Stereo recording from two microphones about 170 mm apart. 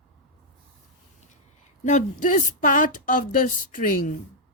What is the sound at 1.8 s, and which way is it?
Speech, 45° left (ahead or behind).